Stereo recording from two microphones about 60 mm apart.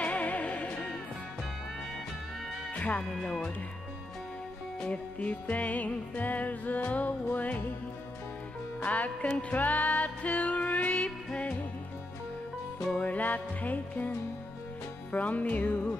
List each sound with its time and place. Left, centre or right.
0.0 s music: left
2.7 s music: left
3.2 s speech: centre
4.8 s music: left
8.8 s music: left
12.9 s music: left